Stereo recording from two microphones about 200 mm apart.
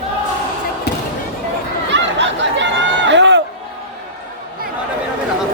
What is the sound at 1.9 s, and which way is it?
Chatter, 65° right (ahead or behind).